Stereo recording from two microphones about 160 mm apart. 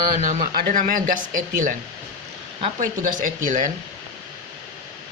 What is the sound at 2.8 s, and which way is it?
Speech, 55° right (ahead or behind).